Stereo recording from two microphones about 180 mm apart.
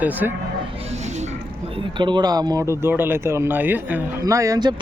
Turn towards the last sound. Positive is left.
turn(degrees=-20)  # may be behind; listen again after turning